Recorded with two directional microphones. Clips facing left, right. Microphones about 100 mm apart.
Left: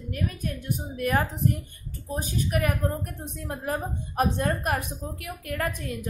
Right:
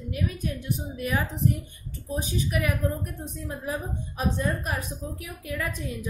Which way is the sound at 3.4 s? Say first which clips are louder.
Left 2 dB; 60° left (ahead or behind).